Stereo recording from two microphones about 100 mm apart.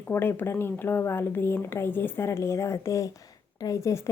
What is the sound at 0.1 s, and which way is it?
A woman's voice, 25° left (ahead or behind).